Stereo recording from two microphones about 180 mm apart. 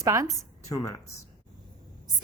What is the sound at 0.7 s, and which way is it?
Speech, 20° left (ahead or behind).